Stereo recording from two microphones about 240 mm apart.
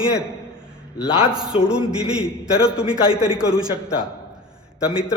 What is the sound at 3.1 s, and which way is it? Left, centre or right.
Speech, centre.